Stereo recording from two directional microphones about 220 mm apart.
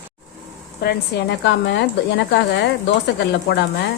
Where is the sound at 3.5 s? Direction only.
50° left (ahead or behind).